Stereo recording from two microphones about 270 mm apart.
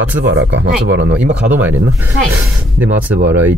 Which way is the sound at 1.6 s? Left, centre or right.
Centre.